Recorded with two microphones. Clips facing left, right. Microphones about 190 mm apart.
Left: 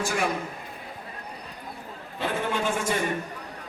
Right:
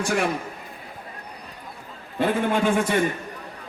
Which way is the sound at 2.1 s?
55° right (ahead or behind).